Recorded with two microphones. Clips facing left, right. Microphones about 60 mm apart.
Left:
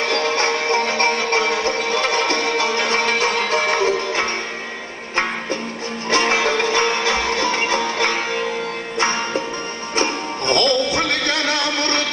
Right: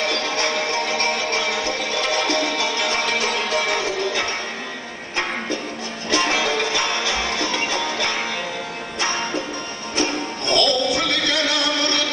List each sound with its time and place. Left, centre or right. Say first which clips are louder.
0.1 s music: left 4 dB; left
6.1 s music: left 3 dB; left
9.9 s music: left 1 dB; left